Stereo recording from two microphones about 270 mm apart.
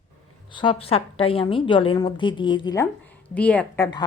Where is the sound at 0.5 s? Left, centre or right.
Centre.